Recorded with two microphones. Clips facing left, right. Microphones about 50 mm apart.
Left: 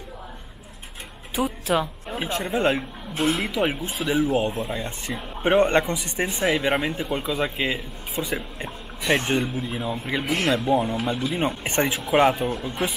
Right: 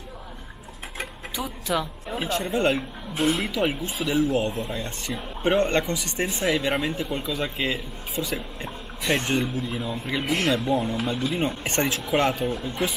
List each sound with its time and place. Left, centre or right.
1.4 s speech: centre
3.2 s speech: centre
3.5 s speech: centre
10.7 s speech: centre
11.0 s speech: centre; by 12.9 s left